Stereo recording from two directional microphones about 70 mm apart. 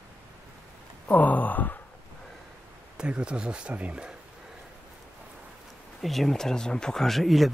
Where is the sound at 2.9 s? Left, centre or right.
Centre.